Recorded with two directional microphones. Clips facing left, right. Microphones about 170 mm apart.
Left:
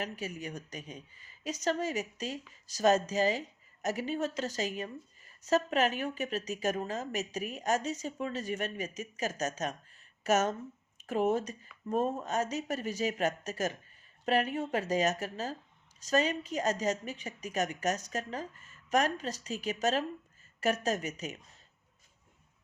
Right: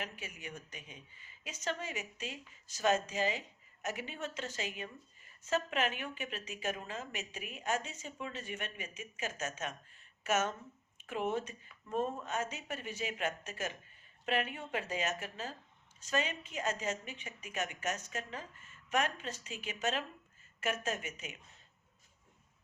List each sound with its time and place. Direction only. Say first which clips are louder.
0.0 s speech: left 7 dB; 40° left (ahead or behind)